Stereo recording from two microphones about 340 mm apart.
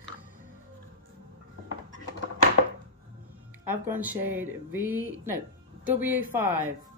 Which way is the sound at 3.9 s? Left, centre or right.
Centre.